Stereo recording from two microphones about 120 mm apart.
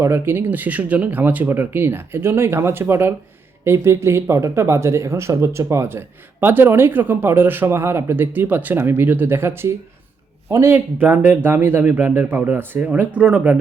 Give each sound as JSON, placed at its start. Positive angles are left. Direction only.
{"t": 0.0, "sound": "speech", "side_deg": -20}